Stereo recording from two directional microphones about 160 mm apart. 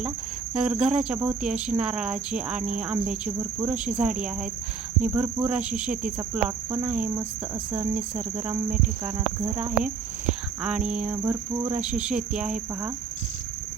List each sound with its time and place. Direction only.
0.5 s speech: 5° right (ahead or behind)
5.1 s speech: 10° right (ahead or behind)
9.6 s speech: 10° right (ahead or behind)
11.2 s cricket: 20° right (ahead or behind)
11.8 s speech: 5° right (ahead or behind)